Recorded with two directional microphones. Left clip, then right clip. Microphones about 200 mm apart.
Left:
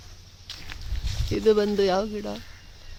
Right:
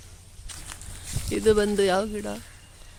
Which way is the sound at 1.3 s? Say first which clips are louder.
Even; 5° left (ahead or behind).